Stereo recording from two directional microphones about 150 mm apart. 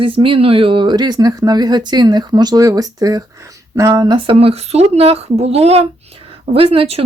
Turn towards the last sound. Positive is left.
turn(degrees=-40)  # may be behind; listen again after turning